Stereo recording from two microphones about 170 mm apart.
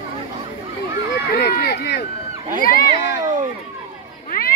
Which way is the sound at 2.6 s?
60° left (ahead or behind).